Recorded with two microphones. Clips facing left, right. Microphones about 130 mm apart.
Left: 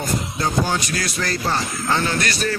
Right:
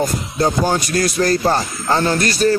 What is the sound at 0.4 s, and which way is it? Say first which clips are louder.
Speech: right 7 dB; 45° right (ahead or behind).